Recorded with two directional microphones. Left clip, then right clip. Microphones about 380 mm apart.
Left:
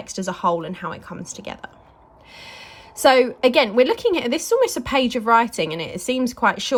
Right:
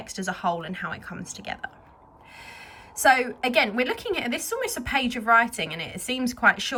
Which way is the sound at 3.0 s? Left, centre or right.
Centre.